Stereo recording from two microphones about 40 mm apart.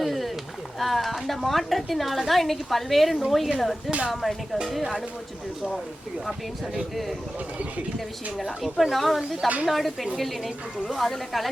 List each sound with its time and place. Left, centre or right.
0.0 s a sound: centre
0.8 s a woman's voice: centre
6.9 s a woman's voice: centre